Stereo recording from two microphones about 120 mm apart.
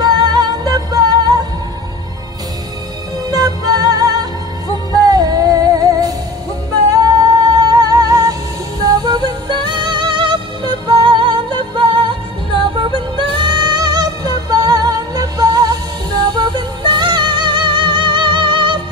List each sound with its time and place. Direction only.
0.0 s music: 35° right (ahead or behind)
3.3 s music: 30° right (ahead or behind)